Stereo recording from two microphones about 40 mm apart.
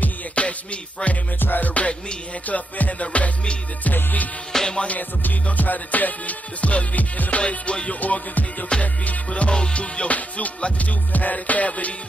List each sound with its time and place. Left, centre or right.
0.4 s music: left
1.4 s music: left
1.7 s music: left
4.5 s music: centre
4.9 s music: left
8.0 s music: left